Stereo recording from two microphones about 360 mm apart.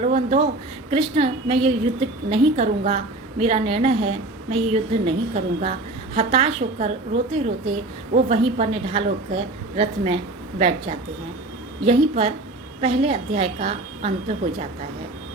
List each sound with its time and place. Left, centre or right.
0.0 s a woman's voice: centre